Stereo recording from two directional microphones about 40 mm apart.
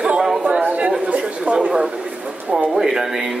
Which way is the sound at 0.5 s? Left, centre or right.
Right.